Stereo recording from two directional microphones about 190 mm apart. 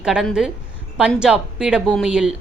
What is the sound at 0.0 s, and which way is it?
Speech, 5° right (ahead or behind).